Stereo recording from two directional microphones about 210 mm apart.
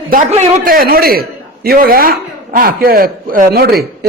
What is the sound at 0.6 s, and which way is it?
A man's voice, 45° right (ahead or behind).